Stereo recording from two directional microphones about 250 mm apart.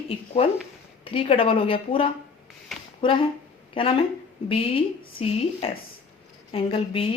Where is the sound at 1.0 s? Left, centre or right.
Left.